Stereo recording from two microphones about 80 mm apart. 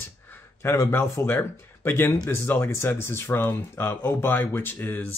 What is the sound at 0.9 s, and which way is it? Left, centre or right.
Speech, left.